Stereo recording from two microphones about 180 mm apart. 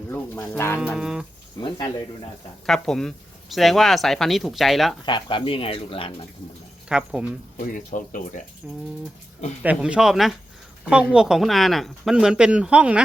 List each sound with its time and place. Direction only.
0.1 s music: 10° left (ahead or behind)
0.9 s speech: 5° right (ahead or behind)
2.6 s speech: centre (ahead or behind)
5.0 s speech: 25° left (ahead or behind)
6.8 s speech: 5° right (ahead or behind)
7.5 s speech: 45° left (ahead or behind)
8.6 s speech: 5° right (ahead or behind)